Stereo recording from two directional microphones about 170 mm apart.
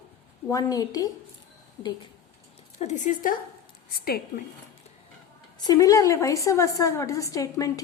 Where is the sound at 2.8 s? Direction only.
45° left (ahead or behind).